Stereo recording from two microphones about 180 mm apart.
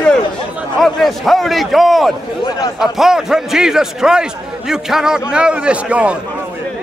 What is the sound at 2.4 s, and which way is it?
Speech, 20° left (ahead or behind).